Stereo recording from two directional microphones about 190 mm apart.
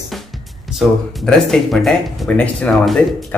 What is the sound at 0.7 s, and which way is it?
Speech, centre (ahead or behind).